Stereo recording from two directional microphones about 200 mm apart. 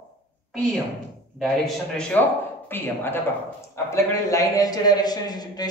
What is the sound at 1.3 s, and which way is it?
A man's voice, centre (ahead or behind).